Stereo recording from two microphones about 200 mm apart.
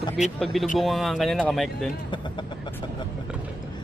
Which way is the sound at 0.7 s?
Centre (ahead or behind).